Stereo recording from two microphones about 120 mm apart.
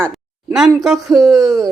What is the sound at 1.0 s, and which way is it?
Speech, centre (ahead or behind).